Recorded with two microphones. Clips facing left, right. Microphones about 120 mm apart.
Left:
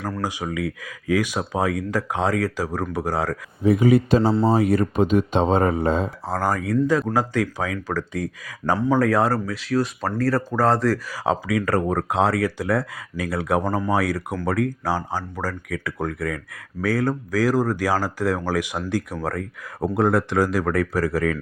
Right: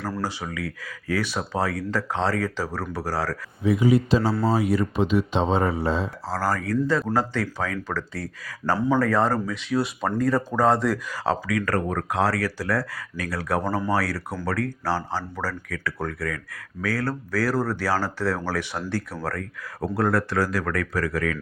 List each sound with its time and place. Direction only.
0.2 s speech: 15° left (ahead or behind)
3.6 s speech: 50° left (ahead or behind)
4.2 s speech: 20° left (ahead or behind)
4.5 s speech: 50° left (ahead or behind)
6.2 s speech: 20° left (ahead or behind); by 11.2 s centre (ahead or behind)
11.2 s speech: 20° left (ahead or behind)